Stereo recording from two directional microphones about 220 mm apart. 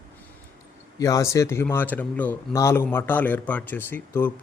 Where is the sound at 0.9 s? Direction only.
15° left (ahead or behind).